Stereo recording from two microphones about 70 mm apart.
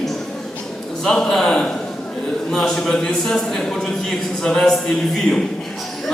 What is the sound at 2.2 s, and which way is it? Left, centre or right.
A man's voice, centre.